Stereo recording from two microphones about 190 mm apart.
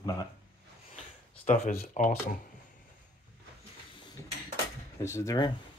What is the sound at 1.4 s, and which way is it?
Speech, 40° left (ahead or behind).